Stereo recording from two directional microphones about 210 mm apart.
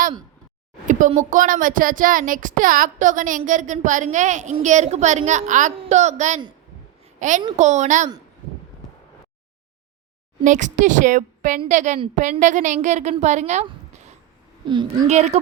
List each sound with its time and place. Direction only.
0.9 s a woman's voice: 35° right (ahead or behind)
10.4 s speech: 35° right (ahead or behind)
14.7 s speech: 20° right (ahead or behind)